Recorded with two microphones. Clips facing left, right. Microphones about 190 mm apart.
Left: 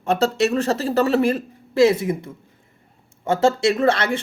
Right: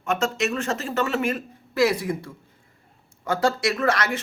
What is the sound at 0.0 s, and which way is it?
A man's voice, 35° left (ahead or behind).